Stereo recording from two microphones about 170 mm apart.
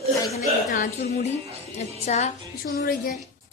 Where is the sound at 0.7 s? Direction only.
50° left (ahead or behind).